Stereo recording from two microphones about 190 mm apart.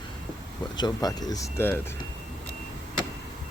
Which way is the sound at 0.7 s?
20° left (ahead or behind).